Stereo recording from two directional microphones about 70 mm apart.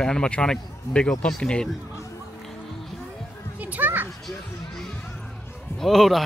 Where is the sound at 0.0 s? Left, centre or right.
Centre.